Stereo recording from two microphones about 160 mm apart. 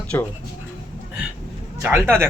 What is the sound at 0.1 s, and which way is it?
Speech, 15° left (ahead or behind).